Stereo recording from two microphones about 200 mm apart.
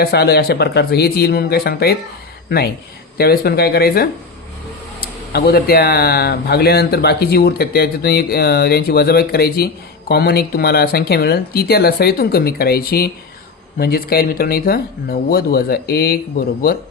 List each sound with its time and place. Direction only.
0.0 s speech: 55° left (ahead or behind)
3.2 s speech: 50° left (ahead or behind)
5.3 s speech: 50° left (ahead or behind)